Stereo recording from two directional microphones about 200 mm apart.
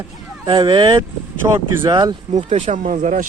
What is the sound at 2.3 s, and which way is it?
Speech, 35° right (ahead or behind).